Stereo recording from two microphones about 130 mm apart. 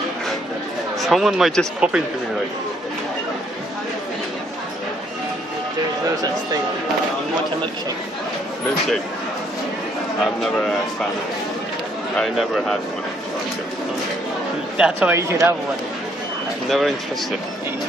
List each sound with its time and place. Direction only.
1.0 s speech: centre (ahead or behind)
10.2 s speech: 5° left (ahead or behind)
12.2 s speech: centre (ahead or behind)
14.8 s speech: 10° right (ahead or behind)
16.6 s speech: centre (ahead or behind)